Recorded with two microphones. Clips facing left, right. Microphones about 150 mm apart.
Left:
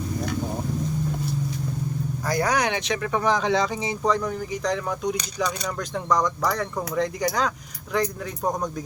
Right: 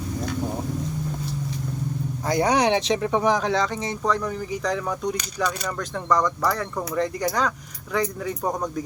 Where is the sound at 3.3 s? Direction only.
Centre (ahead or behind).